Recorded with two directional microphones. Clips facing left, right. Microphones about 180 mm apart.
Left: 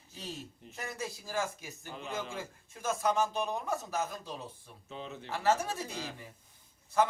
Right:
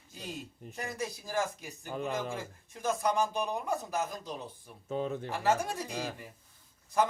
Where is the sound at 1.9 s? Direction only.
55° right (ahead or behind).